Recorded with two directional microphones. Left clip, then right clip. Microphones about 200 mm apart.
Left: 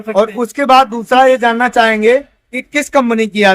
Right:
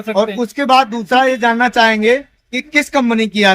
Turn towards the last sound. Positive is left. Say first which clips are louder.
# left 2 dB
turn(degrees=15)  # may be behind; listen again after turning